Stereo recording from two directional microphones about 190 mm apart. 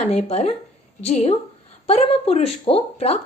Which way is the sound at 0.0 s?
35° left (ahead or behind).